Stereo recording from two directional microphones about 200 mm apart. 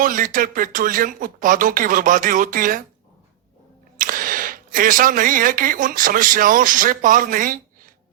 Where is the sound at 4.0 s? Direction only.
45° right (ahead or behind).